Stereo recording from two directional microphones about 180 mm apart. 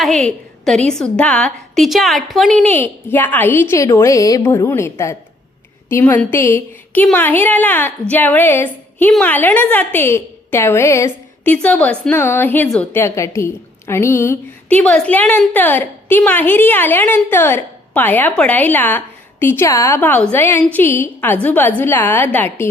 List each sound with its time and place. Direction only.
0.0 s a woman's voice: 5° left (ahead or behind)